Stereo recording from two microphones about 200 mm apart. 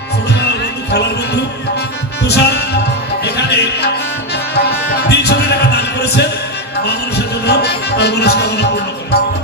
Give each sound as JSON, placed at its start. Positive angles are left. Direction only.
{"t": 0.3, "sound": "music", "side_deg": 55}
{"t": 7.4, "sound": "music", "side_deg": 55}